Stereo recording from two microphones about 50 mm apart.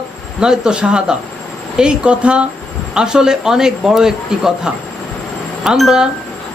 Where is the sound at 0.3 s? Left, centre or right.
Centre.